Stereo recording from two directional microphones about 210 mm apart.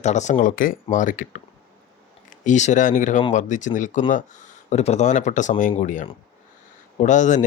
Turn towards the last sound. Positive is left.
turn(degrees=35)  # may be behind; listen again after turning